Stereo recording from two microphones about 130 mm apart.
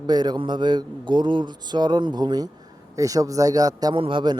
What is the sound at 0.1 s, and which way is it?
A man's voice, 30° right (ahead or behind).